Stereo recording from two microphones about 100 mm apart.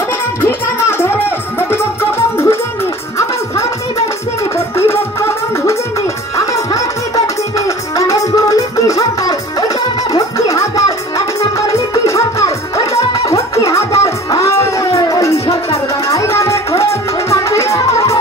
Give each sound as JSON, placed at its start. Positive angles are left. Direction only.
{"t": 0.4, "sound": "music", "side_deg": 25}
{"t": 4.6, "sound": "music", "side_deg": 25}
{"t": 6.3, "sound": "music", "side_deg": 35}